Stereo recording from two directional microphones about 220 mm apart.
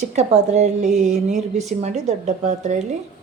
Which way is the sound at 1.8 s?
30° right (ahead or behind).